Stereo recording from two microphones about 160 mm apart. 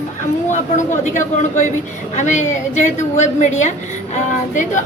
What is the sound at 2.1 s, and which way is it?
A woman's voice, 50° left (ahead or behind).